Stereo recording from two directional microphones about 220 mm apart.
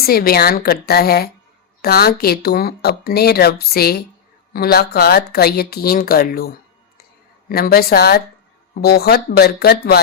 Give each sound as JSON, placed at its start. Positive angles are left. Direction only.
{"t": 0.0, "sound": "speech", "side_deg": 45}
{"t": 7.5, "sound": "speech", "side_deg": 45}